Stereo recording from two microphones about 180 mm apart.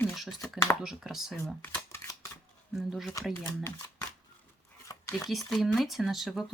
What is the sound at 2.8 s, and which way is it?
Speech, centre (ahead or behind).